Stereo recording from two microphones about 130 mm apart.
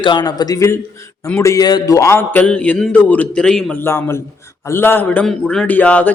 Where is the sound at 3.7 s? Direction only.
15° left (ahead or behind).